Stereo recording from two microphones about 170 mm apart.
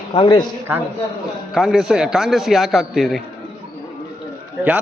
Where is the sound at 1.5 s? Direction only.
Centre (ahead or behind).